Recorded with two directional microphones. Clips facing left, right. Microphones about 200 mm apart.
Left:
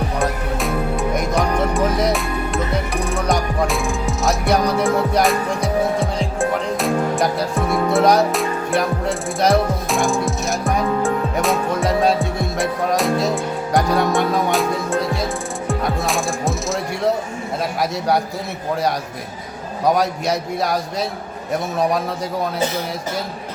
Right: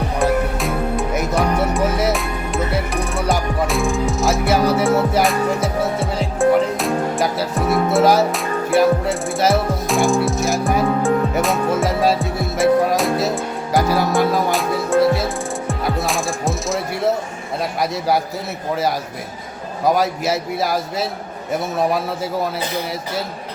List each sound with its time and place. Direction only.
0.2 s music: centre (ahead or behind)
19.8 s a man's voice: centre (ahead or behind)